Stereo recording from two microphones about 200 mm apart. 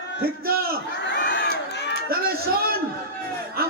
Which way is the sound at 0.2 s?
50° right (ahead or behind).